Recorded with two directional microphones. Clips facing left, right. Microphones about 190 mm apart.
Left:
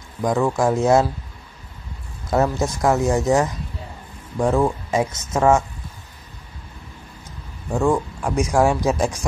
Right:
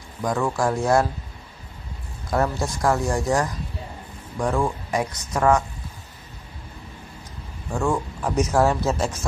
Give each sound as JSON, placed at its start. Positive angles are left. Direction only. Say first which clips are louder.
{"t": 0.2, "sound": "speech", "louder": "left 4 dB", "side_deg": 20}
{"t": 2.3, "sound": "speech", "louder": "left 4 dB", "side_deg": 25}
{"t": 7.7, "sound": "speech", "louder": "left 4 dB", "side_deg": 15}